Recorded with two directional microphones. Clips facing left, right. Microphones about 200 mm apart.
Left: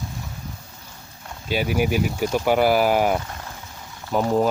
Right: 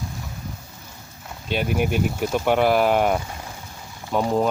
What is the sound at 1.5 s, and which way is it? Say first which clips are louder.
Speech: left 1 dB; 5° left (ahead or behind).